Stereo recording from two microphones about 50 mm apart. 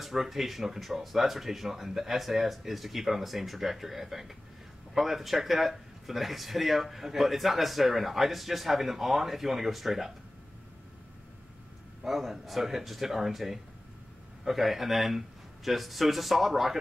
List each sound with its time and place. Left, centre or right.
0.0 s speech: centre
12.0 s speech: centre